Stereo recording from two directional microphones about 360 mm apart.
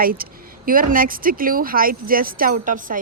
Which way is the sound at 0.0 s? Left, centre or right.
Right.